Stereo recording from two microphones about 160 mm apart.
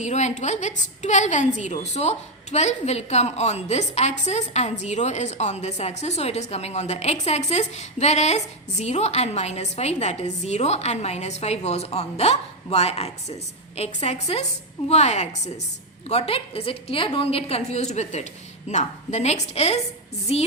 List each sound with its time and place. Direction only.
0.0 s a woman's voice: 45° left (ahead or behind)